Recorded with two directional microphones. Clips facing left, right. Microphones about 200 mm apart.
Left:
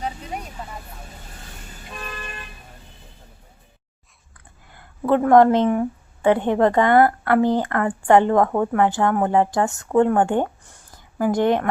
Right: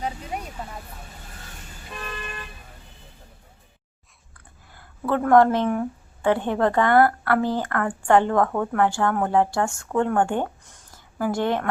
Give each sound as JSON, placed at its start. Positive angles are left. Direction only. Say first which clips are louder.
{"t": 5.0, "sound": "a woman's voice", "louder": "left 3 dB", "side_deg": 15}